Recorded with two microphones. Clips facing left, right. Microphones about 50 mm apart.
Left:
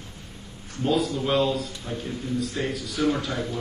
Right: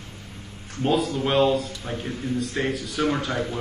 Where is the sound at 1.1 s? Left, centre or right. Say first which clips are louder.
Right 3 dB; right.